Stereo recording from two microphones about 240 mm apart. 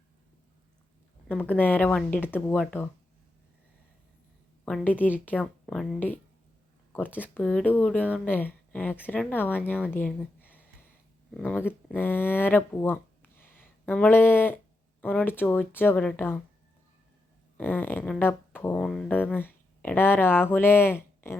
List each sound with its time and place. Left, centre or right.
1.3 s speech: centre
4.6 s speech: centre
17.6 s speech: centre